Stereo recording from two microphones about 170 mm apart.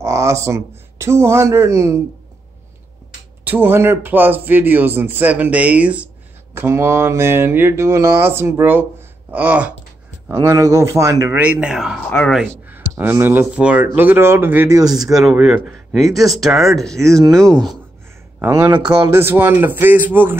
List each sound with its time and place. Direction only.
0.0 s speech: 15° right (ahead or behind)
3.4 s speech: 10° right (ahead or behind)
12.1 s speech: 10° left (ahead or behind)
12.4 s speech: 10° right (ahead or behind)
15.2 s speech: 5° right (ahead or behind)
18.4 s speech: 15° right (ahead or behind)